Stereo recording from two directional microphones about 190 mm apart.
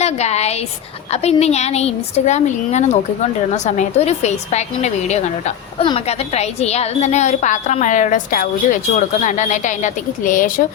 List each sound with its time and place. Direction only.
0.0 s a woman's voice: 35° left (ahead or behind)